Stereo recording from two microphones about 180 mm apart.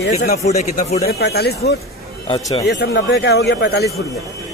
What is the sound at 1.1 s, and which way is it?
Speech, 65° left (ahead or behind).